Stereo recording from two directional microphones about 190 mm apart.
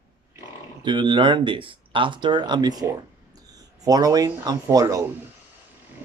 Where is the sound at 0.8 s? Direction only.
25° right (ahead or behind).